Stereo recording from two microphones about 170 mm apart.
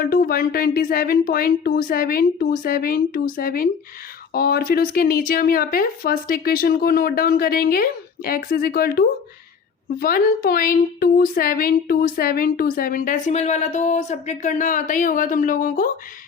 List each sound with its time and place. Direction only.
0.0 s speech: 60° left (ahead or behind)